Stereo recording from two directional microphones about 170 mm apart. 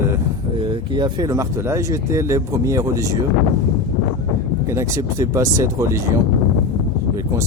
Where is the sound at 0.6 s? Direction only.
30° right (ahead or behind).